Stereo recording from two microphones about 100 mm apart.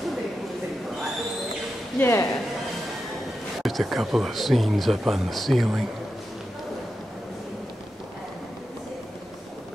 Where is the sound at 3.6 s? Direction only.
Centre (ahead or behind).